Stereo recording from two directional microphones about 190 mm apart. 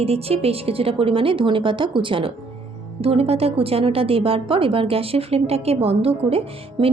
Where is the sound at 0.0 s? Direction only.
30° right (ahead or behind).